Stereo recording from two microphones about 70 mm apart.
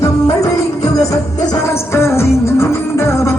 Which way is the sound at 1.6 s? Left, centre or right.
Left.